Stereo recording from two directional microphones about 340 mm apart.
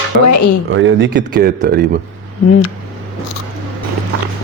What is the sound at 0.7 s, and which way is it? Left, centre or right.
Speech, right.